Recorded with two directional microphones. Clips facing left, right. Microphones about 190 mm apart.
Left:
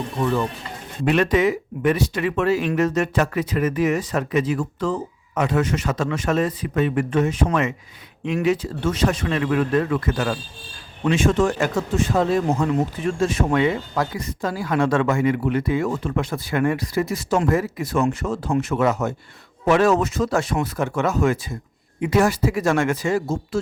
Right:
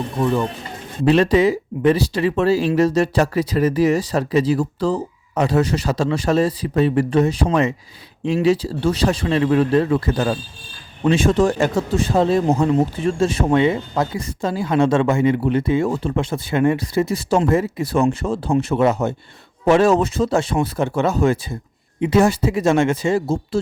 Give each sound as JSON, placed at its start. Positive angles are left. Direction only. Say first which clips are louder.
{"t": 1.0, "sound": "speech", "louder": "right 4 dB", "side_deg": -30}